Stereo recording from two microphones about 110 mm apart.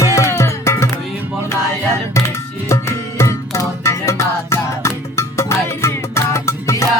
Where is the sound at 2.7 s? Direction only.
25° left (ahead or behind).